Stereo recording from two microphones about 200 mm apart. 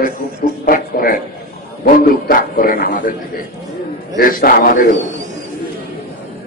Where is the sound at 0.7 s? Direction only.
45° left (ahead or behind).